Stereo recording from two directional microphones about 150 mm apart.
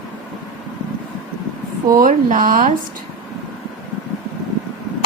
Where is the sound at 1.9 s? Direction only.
65° right (ahead or behind).